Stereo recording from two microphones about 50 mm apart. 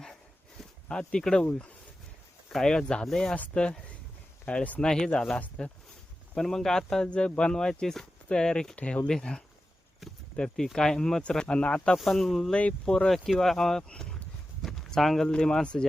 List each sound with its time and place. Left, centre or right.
0.9 s speech: centre
2.5 s speech: centre
3.5 s speech: centre
4.8 s speech: centre
8.7 s speech: left
11.2 s speech: left
11.9 s speech: centre
12.5 s speech: left
13.1 s speech: centre
14.6 s a sound: centre
15.3 s speech: centre